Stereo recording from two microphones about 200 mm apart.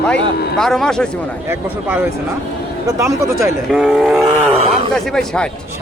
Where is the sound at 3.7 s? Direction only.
5° right (ahead or behind).